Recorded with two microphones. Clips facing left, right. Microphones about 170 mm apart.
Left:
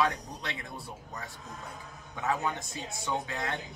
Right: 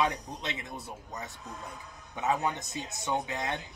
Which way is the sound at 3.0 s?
20° right (ahead or behind).